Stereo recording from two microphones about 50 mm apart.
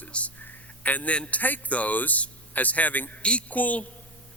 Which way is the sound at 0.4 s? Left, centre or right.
Left.